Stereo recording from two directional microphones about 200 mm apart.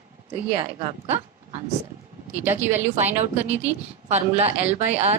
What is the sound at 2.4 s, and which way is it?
Speech, 10° right (ahead or behind).